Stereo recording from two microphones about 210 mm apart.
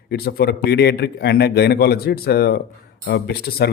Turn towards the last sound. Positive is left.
turn(degrees=50)  # may be behind; listen again after turning